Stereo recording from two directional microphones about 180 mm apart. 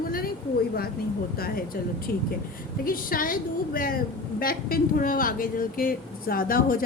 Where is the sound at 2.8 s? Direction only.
50° left (ahead or behind).